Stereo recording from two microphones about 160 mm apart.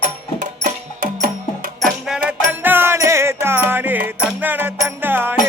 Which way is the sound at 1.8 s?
5° right (ahead or behind).